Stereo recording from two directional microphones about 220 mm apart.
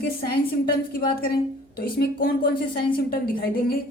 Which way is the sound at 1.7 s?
40° left (ahead or behind).